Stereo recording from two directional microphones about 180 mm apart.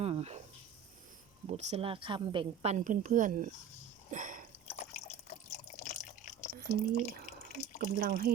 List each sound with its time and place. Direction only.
0.0 s a sound: 35° right (ahead or behind)
1.5 s speech: 35° right (ahead or behind)
2.7 s speech: 45° right (ahead or behind)
4.1 s a sound: 45° right (ahead or behind)
4.7 s drip: 40° left (ahead or behind)
7.8 s speech: 55° right (ahead or behind)